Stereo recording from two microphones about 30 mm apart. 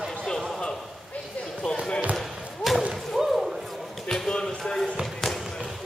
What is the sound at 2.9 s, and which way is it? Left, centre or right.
Slam, centre.